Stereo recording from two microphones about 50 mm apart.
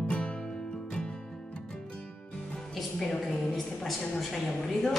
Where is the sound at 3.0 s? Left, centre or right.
Centre.